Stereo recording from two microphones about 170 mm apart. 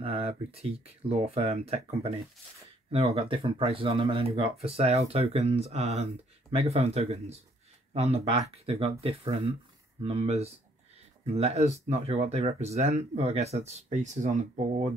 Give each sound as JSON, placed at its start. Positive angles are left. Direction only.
{"t": 0.0, "sound": "speech", "side_deg": -35}
{"t": 10.0, "sound": "speech", "side_deg": -40}